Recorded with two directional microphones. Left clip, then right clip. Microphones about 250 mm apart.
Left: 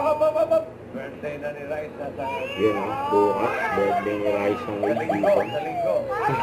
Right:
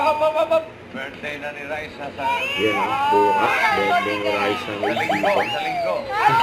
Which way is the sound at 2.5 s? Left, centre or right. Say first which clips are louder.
Right 3 dB; centre.